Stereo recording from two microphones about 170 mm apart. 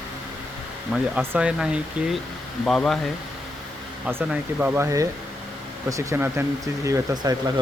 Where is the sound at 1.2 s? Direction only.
5° right (ahead or behind).